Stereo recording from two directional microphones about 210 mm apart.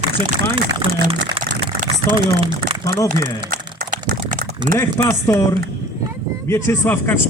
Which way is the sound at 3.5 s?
40° right (ahead or behind).